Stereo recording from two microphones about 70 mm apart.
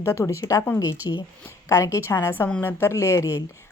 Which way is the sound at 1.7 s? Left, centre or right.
Left.